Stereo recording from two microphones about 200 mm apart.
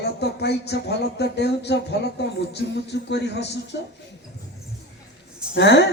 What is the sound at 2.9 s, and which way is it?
Speech, 60° left (ahead or behind).